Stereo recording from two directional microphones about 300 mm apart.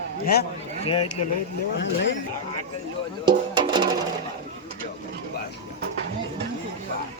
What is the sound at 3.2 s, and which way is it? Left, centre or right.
Music, centre.